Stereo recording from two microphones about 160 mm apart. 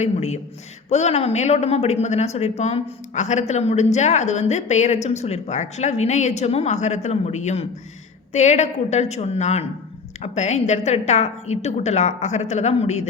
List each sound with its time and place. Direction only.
0.0 s a woman's voice: 45° left (ahead or behind)